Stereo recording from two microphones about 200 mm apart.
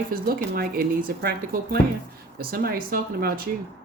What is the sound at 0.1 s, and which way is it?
Speech, 45° right (ahead or behind).